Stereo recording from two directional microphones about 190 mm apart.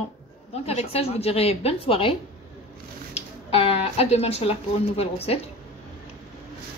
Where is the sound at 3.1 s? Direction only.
30° left (ahead or behind).